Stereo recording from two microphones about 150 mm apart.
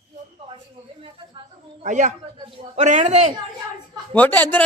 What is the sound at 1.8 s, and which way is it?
A man's voice, 55° right (ahead or behind).